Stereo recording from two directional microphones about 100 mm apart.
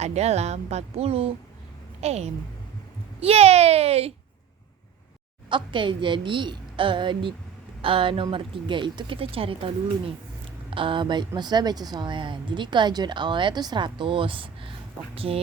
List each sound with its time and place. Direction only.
0.0 s a woman's voice: 90° right
5.5 s a woman's voice: 55° right (ahead or behind)
15.1 s speech: 70° right (ahead or behind)